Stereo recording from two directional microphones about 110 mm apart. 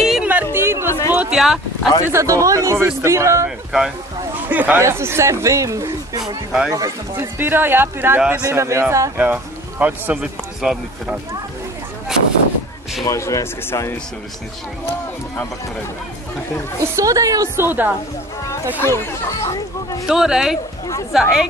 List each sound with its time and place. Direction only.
0.1 s music: 15° right (ahead or behind)
0.8 s a sound: 25° left (ahead or behind)
1.1 s a sound: 15° right (ahead or behind)
1.4 s speech: centre (ahead or behind)
2.1 s speech: 30° right (ahead or behind)
3.4 s speech: 5° right (ahead or behind)
4.5 s speech: 15° right (ahead or behind)
10.6 s speech: 5° right (ahead or behind)
12.1 s a sound: 5° right (ahead or behind)
13.0 s speech: 30° left (ahead or behind)
16.8 s a woman's voice: 30° right (ahead or behind)
17.6 s a woman's voice: 15° right (ahead or behind)
18.8 s speech: 25° left (ahead or behind)
20.1 s speech: 5° right (ahead or behind)